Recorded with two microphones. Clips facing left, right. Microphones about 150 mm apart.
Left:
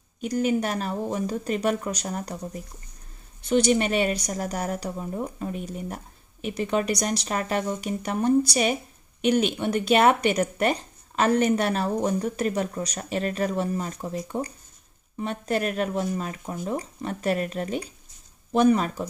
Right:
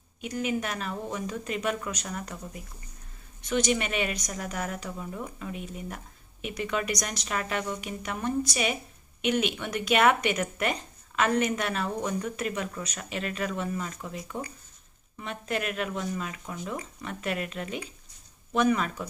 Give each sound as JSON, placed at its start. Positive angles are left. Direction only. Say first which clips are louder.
{"t": 0.2, "sound": "speech", "louder": "left 6 dB", "side_deg": 35}